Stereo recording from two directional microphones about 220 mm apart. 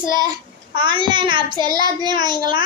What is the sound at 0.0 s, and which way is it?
Child singing, 20° right (ahead or behind).